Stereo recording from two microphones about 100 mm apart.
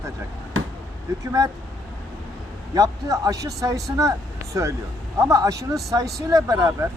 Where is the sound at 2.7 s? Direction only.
35° right (ahead or behind).